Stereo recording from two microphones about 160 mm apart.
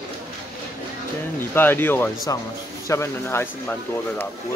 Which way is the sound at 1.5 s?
15° left (ahead or behind).